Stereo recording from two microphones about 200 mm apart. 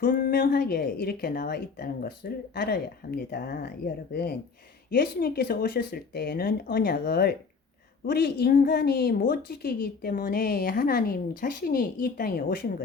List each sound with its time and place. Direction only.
0.0 s a woman's voice: 45° left (ahead or behind)